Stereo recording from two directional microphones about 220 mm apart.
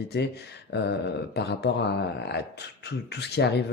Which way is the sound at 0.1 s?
50° left (ahead or behind).